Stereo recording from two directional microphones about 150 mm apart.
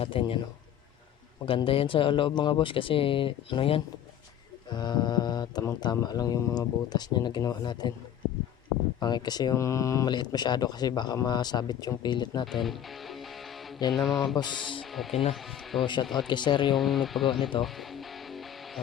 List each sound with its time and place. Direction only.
0.0 s speech: 35° left (ahead or behind)
1.5 s speech: 35° left (ahead or behind)
9.0 s speech: 30° left (ahead or behind)
12.5 s music: centre (ahead or behind)
13.9 s speech: centre (ahead or behind)
14.3 s speech: 30° left (ahead or behind)
14.8 s speech: centre (ahead or behind)
15.7 s speech: 30° left (ahead or behind)
16.7 s speech: centre (ahead or behind)
17.6 s music: centre (ahead or behind)